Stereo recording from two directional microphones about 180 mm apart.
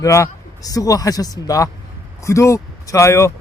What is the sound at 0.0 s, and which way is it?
A man's voice, 15° left (ahead or behind).